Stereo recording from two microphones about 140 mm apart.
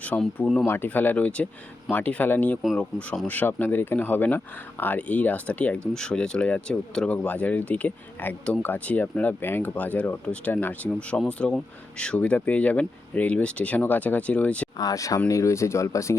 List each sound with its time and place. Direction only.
0.0 s speech: 10° left (ahead or behind)
0.7 s speech: 15° left (ahead or behind)
2.6 s speech: centre (ahead or behind)
3.2 s speech: 15° left (ahead or behind)
14.8 s speech: 25° left (ahead or behind)